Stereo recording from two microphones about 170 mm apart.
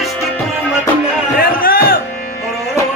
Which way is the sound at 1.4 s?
60° left (ahead or behind).